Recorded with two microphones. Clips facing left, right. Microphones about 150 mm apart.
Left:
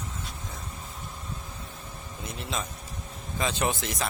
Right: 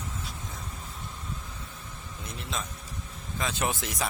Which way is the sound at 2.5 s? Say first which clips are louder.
Left 1 dB; centre (ahead or behind).